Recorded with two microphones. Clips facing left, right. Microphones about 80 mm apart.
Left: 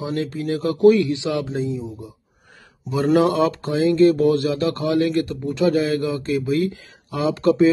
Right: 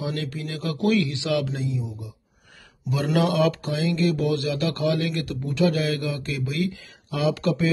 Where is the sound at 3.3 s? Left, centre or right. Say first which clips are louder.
Left 3 dB; left.